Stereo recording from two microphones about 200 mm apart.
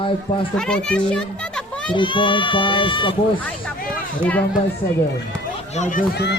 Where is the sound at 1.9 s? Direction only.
25° left (ahead or behind).